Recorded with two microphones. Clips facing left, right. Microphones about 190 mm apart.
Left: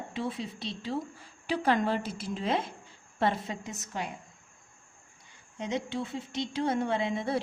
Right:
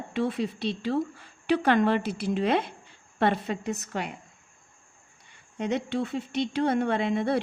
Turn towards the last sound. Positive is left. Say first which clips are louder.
# right 4 dB
turn(degrees=-65)  # may be behind; listen again after turning